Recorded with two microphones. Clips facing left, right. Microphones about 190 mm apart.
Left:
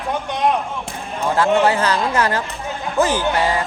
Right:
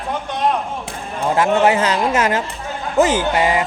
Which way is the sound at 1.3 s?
20° right (ahead or behind).